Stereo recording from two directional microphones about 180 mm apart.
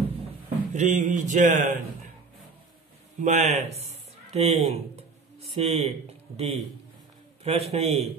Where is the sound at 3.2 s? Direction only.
40° right (ahead or behind).